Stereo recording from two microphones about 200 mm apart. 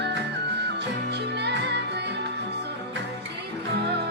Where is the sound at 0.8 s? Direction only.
55° right (ahead or behind).